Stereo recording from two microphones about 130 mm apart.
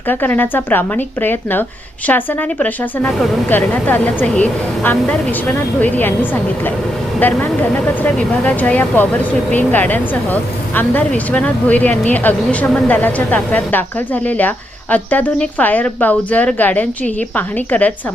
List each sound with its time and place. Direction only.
0.1 s speech: 15° left (ahead or behind)